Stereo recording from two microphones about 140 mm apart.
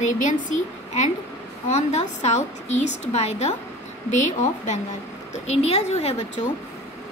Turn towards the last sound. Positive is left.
turn(degrees=50)  # may be behind; listen again after turning